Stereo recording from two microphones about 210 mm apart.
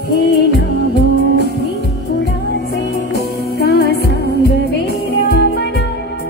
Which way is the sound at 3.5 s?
50° left (ahead or behind).